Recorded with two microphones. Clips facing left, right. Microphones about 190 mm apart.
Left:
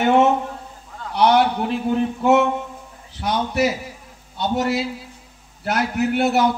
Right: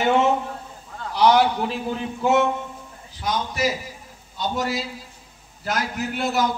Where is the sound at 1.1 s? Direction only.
60° left (ahead or behind).